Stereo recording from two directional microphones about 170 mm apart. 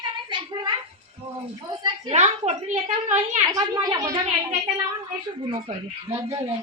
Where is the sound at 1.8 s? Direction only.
40° right (ahead or behind).